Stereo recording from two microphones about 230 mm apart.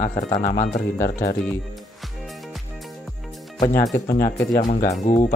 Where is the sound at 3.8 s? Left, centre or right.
Centre.